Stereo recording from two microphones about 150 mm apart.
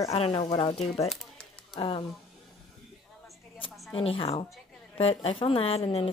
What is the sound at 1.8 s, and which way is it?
Speech, 40° left (ahead or behind).